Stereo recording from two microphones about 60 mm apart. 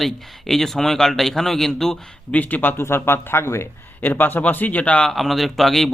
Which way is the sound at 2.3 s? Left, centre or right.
Left.